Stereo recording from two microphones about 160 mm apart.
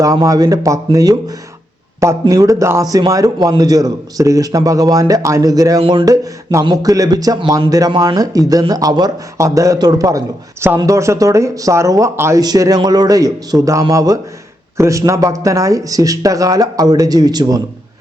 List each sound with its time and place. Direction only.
0.0 s speech: 20° right (ahead or behind)